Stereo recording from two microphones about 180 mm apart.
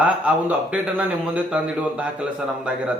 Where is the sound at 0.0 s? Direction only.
5° right (ahead or behind).